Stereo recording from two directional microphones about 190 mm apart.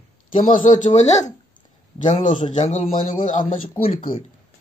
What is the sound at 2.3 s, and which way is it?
Speech, 25° left (ahead or behind).